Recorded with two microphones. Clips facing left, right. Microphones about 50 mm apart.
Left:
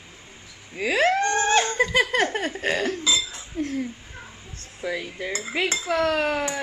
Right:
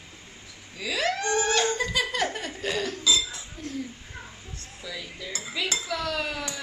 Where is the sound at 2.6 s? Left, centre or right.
Left.